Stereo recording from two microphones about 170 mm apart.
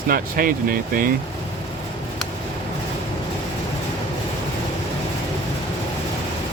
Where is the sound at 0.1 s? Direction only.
55° right (ahead or behind).